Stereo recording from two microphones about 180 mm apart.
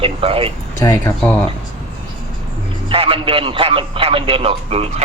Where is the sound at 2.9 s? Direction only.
30° right (ahead or behind).